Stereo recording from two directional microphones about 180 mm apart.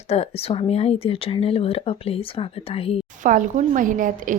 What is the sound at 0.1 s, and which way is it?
Speech, 35° left (ahead or behind).